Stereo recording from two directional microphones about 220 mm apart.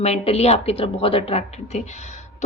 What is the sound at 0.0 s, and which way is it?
A woman's voice, 30° left (ahead or behind).